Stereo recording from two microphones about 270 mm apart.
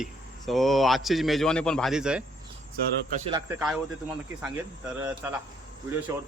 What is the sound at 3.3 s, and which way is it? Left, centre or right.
Speech, centre.